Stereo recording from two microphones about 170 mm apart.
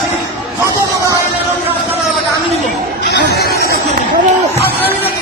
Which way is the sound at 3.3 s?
70° left (ahead or behind).